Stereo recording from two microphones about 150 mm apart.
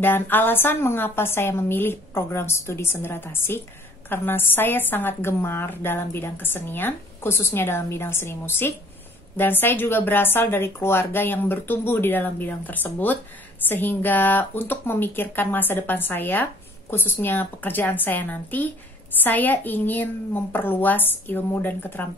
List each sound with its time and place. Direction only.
0.0 s a woman's voice: 15° left (ahead or behind)